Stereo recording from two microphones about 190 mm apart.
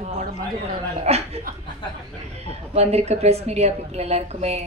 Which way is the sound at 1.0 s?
35° right (ahead or behind).